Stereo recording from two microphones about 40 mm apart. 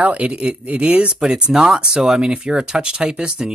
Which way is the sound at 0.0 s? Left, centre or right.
Right.